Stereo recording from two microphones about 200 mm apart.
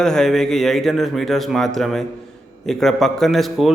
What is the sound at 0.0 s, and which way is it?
A man's voice, 5° left (ahead or behind).